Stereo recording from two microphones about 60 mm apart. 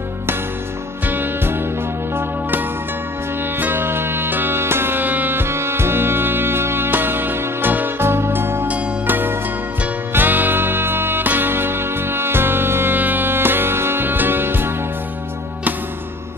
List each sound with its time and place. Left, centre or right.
1.0 s music: right
3.5 s music: right